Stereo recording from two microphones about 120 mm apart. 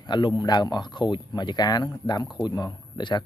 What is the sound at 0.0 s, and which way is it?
Speech, 40° left (ahead or behind).